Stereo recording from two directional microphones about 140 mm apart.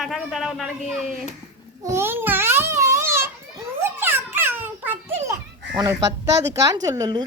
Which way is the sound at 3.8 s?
15° right (ahead or behind).